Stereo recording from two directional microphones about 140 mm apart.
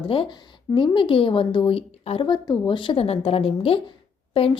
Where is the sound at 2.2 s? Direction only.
30° left (ahead or behind).